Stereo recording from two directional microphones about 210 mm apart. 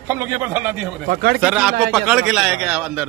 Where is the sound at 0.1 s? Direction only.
10° right (ahead or behind).